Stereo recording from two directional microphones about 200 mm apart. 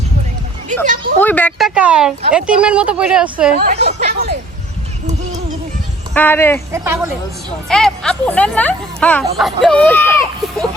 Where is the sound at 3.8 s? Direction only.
50° right (ahead or behind).